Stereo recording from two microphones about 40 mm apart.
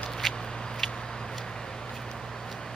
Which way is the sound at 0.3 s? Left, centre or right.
Centre.